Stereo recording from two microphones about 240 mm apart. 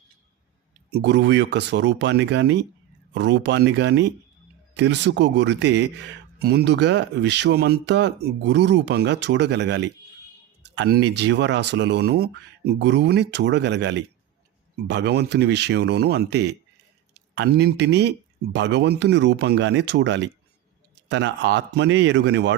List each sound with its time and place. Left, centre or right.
0.9 s a man's voice: right